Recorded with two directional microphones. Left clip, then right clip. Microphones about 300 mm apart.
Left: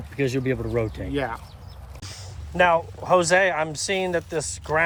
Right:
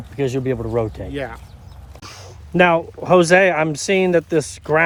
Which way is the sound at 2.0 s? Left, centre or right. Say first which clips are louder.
Right 3 dB; centre.